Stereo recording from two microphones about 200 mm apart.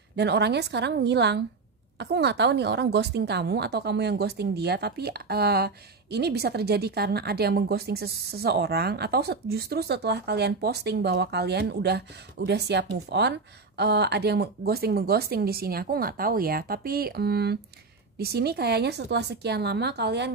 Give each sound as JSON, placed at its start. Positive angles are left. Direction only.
{"t": 0.1, "sound": "a woman's voice", "side_deg": -55}